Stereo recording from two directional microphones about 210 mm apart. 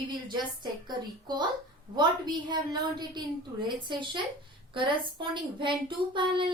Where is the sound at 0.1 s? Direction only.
20° right (ahead or behind).